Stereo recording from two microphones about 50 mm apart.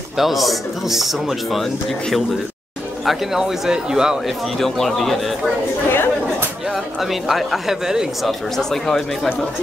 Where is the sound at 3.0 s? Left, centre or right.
Centre.